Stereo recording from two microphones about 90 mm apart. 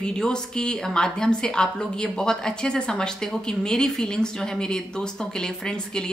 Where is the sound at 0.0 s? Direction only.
10° left (ahead or behind).